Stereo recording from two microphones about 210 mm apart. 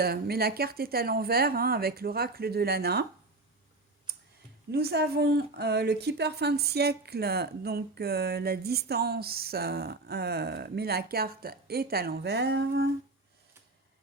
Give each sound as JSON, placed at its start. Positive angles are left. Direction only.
{"t": 0.0, "sound": "speech", "side_deg": -45}
{"t": 4.7, "sound": "speech", "side_deg": -50}